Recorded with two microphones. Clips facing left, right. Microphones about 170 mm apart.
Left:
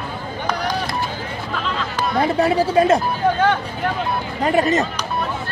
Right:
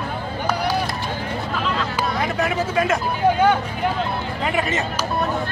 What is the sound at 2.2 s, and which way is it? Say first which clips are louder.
Speech: left 8 dB; 35° left (ahead or behind).